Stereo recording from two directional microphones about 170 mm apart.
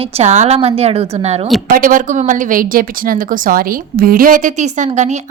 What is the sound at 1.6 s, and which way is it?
A woman's voice, 55° right (ahead or behind).